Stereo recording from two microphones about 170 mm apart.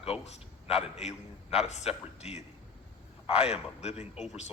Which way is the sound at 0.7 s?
40° left (ahead or behind).